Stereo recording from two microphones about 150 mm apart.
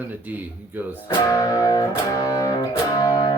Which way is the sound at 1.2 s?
25° left (ahead or behind).